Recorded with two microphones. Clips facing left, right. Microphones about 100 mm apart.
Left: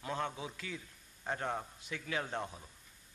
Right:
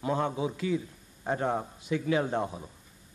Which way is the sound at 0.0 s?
15° right (ahead or behind).